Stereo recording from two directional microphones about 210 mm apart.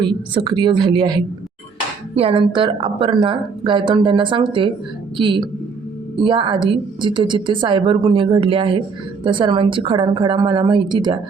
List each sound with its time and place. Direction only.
0.0 s speech: 20° right (ahead or behind)